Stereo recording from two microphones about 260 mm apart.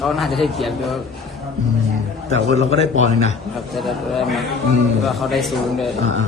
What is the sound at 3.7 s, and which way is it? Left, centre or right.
A man's voice, centre.